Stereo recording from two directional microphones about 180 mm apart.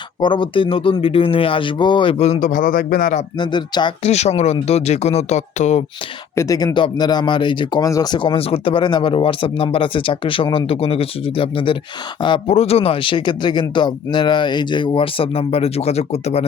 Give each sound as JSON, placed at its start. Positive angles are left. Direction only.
{"t": 0.2, "sound": "speech", "side_deg": 25}
{"t": 3.3, "sound": "speech", "side_deg": 25}
{"t": 4.1, "sound": "speech", "side_deg": 35}
{"t": 6.3, "sound": "speech", "side_deg": 20}